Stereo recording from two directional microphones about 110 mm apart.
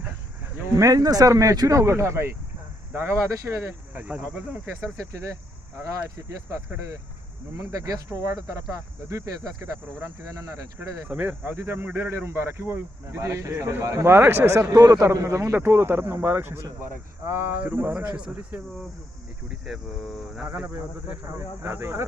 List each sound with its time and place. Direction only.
0.6 s speech: 30° right (ahead or behind)
5.1 s speech: 30° right (ahead or behind)
11.1 s speech: 15° right (ahead or behind)
18.2 s speech: 5° right (ahead or behind)
20.5 s speech: 15° right (ahead or behind)
21.3 s speech: 25° right (ahead or behind)